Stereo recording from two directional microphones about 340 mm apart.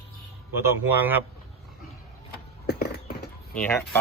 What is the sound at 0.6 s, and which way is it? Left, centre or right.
Speech, centre.